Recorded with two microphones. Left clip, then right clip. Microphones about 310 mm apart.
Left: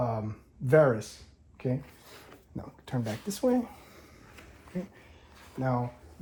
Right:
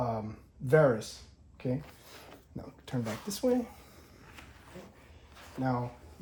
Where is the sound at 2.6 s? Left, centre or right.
Centre.